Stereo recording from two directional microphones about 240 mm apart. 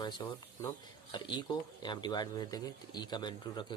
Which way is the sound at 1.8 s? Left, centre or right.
Centre.